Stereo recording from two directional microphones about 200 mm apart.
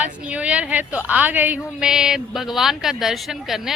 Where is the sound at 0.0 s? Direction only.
5° right (ahead or behind).